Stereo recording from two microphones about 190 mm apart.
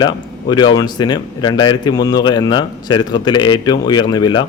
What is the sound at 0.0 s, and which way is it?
Speech, 25° left (ahead or behind).